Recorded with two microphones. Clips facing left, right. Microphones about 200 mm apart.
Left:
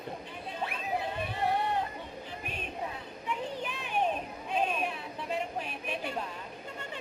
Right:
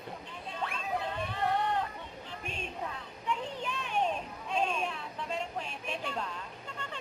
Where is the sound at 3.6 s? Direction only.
5° left (ahead or behind).